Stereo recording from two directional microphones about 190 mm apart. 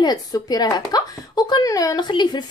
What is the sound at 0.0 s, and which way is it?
Speech, 20° left (ahead or behind).